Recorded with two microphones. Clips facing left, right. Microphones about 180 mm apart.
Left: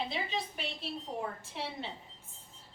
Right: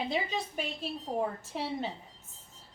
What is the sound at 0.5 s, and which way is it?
A woman's voice, 45° right (ahead or behind).